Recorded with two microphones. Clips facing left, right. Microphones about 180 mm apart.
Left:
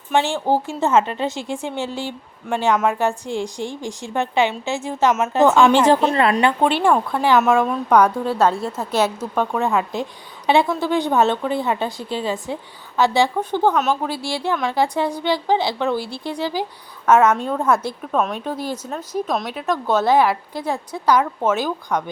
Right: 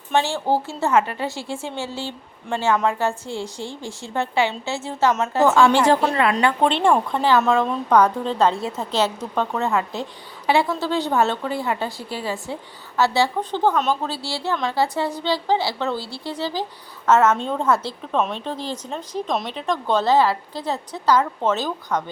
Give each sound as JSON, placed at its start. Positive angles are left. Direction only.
{"t": 0.1, "sound": "speech", "side_deg": 15}
{"t": 6.3, "sound": "speech", "side_deg": 10}